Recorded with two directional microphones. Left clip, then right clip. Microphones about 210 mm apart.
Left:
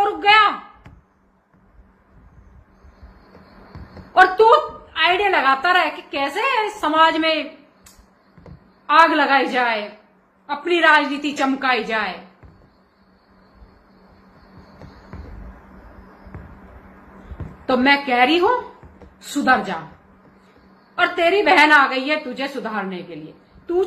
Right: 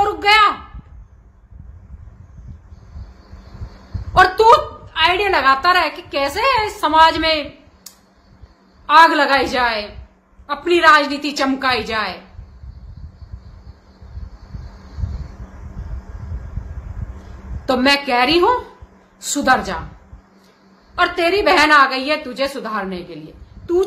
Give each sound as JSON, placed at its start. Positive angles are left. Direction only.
{"t": 0.0, "sound": "a sound", "side_deg": -15}
{"t": 4.1, "sound": "a woman's voice", "side_deg": -15}
{"t": 8.8, "sound": "a woman's voice", "side_deg": -15}
{"t": 17.6, "sound": "a woman's voice", "side_deg": -15}
{"t": 20.9, "sound": "a woman's voice", "side_deg": -15}